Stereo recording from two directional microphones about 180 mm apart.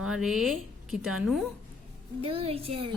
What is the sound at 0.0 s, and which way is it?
A woman's voice, centre (ahead or behind).